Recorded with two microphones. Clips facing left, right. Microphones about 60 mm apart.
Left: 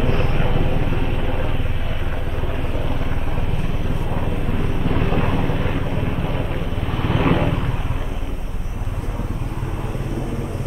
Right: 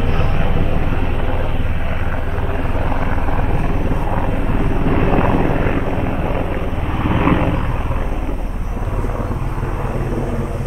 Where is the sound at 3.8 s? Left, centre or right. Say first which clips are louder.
Right 5 dB; right.